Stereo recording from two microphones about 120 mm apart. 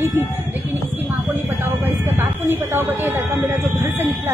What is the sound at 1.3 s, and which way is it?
A woman's voice, 15° right (ahead or behind).